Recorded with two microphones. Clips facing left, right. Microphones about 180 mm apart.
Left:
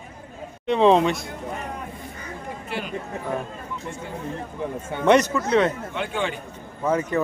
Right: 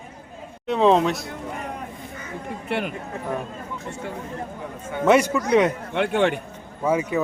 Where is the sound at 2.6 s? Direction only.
60° right (ahead or behind).